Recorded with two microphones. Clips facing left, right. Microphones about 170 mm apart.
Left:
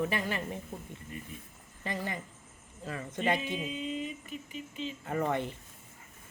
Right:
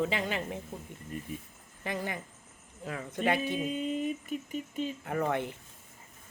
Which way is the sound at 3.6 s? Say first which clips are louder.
Right 4 dB; 50° right (ahead or behind).